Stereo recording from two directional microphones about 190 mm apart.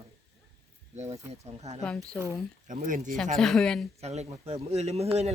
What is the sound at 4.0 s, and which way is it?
Speech, 35° right (ahead or behind).